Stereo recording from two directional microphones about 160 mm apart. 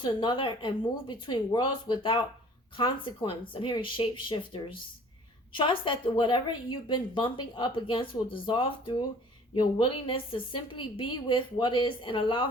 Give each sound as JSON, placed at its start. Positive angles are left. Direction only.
{"t": 0.0, "sound": "a woman's voice", "side_deg": 30}